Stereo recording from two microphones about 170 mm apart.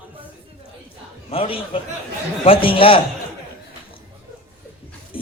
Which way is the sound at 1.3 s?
30° left (ahead or behind).